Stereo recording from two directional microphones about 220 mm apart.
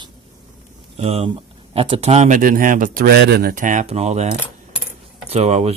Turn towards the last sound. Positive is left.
turn(degrees=-30)  # may be behind; listen again after turning